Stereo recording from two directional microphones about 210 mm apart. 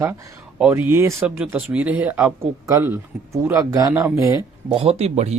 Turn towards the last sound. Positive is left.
turn(degrees=-30)  # may be behind; listen again after turning